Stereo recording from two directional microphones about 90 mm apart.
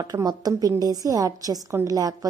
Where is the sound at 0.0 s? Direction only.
45° right (ahead or behind).